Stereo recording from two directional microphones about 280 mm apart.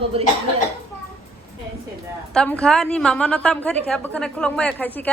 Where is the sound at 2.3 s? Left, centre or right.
Centre.